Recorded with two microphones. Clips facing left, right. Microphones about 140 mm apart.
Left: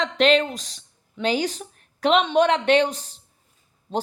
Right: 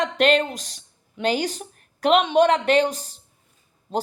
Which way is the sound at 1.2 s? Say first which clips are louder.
Even; 45° right (ahead or behind).